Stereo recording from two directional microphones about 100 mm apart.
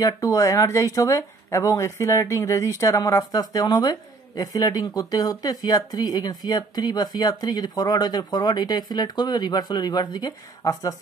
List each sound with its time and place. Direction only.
0.0 s speech: 30° left (ahead or behind)